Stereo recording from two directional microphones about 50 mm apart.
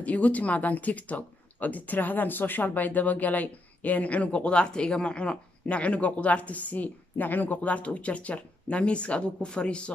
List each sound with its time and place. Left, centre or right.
0.0 s speech: left